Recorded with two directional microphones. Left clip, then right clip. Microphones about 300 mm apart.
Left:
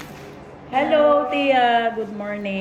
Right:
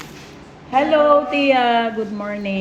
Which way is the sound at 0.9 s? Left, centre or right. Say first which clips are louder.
Right 1 dB; centre.